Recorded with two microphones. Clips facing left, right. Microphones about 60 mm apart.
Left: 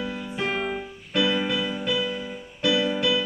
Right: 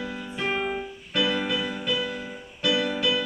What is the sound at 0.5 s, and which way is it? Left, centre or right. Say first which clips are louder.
Keyboard: even; centre.